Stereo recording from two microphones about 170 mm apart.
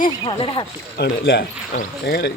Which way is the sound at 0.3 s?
30° left (ahead or behind).